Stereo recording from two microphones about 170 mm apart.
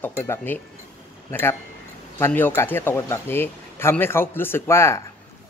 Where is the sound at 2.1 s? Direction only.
10° left (ahead or behind).